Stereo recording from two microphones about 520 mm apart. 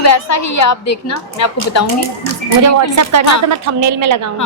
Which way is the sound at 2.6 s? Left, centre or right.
Right.